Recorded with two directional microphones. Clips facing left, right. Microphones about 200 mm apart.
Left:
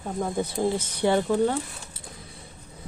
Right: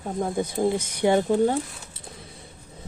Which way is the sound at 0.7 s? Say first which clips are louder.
Right 3 dB; 15° right (ahead or behind).